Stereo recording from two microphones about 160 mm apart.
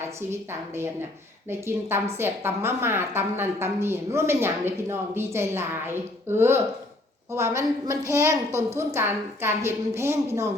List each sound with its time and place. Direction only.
1.5 s a woman's voice: 15° right (ahead or behind)